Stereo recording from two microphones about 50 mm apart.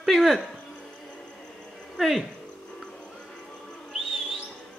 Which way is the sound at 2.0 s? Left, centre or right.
Centre.